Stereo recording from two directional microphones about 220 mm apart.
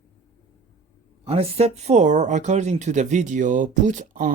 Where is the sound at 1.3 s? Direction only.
25° right (ahead or behind).